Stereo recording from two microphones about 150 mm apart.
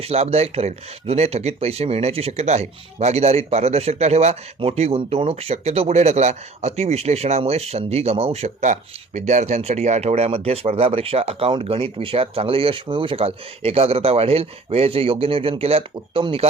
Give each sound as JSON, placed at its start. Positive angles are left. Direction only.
{"t": 0.0, "sound": "speech", "side_deg": -45}